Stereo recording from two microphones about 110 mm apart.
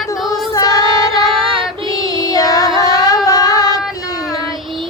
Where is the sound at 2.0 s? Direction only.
35° left (ahead or behind).